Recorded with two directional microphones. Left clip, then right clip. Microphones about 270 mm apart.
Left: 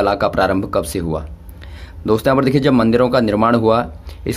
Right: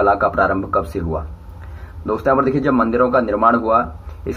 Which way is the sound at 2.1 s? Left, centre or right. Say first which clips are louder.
Left 1 dB; left.